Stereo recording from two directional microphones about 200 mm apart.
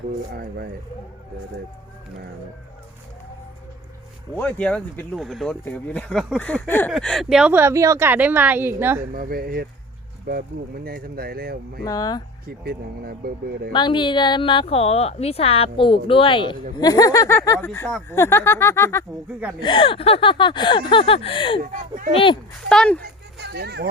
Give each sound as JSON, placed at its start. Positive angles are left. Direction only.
{"t": 0.3, "sound": "speech", "side_deg": -50}
{"t": 4.4, "sound": "a woman's voice", "side_deg": 5}
{"t": 9.1, "sound": "speech", "side_deg": -45}
{"t": 11.9, "sound": "a woman's voice", "side_deg": 20}
{"t": 12.5, "sound": "speech", "side_deg": -50}
{"t": 13.7, "sound": "a woman's voice", "side_deg": 20}
{"t": 19.5, "sound": "a woman's voice", "side_deg": 25}
{"t": 21.6, "sound": "speech", "side_deg": -45}
{"t": 22.1, "sound": "a woman's voice", "side_deg": 25}
{"t": 22.7, "sound": "speech", "side_deg": 5}
{"t": 23.4, "sound": "speech", "side_deg": -55}